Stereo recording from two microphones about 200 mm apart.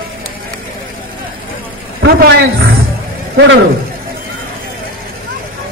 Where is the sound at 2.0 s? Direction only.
50° right (ahead or behind).